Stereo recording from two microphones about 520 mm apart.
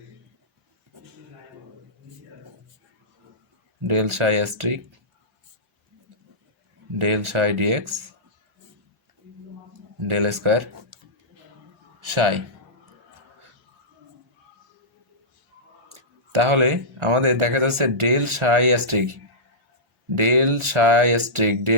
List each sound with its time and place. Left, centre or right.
3.8 s speech: right
7.0 s speech: right
10.1 s speech: right
12.1 s a man's voice: right
16.0 s speech: right
20.1 s speech: right